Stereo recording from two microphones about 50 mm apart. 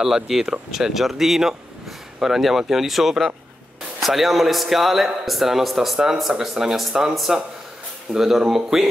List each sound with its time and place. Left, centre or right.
0.0 s a man's voice: centre